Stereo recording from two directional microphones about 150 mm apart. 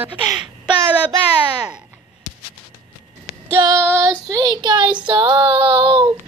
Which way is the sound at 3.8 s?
20° right (ahead or behind).